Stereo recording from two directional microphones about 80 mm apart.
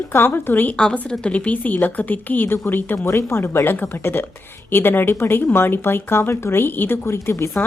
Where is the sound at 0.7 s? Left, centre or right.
Centre.